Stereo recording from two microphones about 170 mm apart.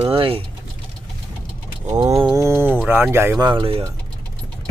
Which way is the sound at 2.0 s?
25° right (ahead or behind).